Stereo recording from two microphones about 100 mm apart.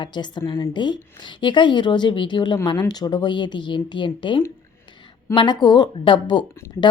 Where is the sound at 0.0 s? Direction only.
50° left (ahead or behind).